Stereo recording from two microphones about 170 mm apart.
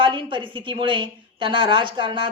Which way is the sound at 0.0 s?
30° right (ahead or behind).